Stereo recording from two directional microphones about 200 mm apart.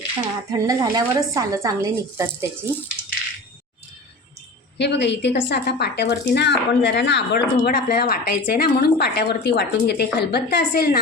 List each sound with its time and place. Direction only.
0.5 s a woman's voice: 20° right (ahead or behind)
4.8 s speech: 60° left (ahead or behind)